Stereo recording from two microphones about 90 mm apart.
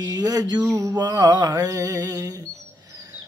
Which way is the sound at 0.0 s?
45° right (ahead or behind).